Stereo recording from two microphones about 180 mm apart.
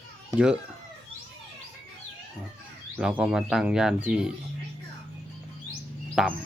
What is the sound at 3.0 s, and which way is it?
Speech, 5° right (ahead or behind).